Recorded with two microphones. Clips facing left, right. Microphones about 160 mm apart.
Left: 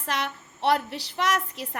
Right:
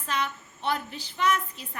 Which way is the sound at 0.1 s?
75° left (ahead or behind).